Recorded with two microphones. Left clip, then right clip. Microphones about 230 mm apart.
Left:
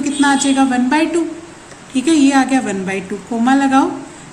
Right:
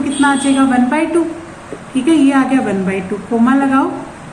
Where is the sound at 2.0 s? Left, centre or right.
Left.